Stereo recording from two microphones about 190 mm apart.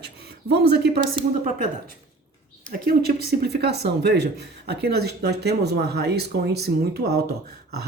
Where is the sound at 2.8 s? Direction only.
55° right (ahead or behind).